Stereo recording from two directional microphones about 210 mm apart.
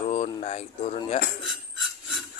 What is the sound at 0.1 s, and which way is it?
Speech, 30° left (ahead or behind).